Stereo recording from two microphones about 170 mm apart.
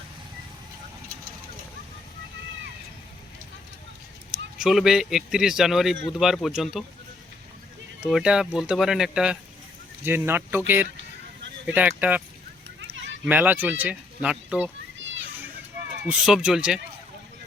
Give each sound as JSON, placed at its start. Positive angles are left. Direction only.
{"t": 4.5, "sound": "speech", "side_deg": -5}
{"t": 8.0, "sound": "speech", "side_deg": -5}
{"t": 13.2, "sound": "speech", "side_deg": -10}
{"t": 16.0, "sound": "speech", "side_deg": -5}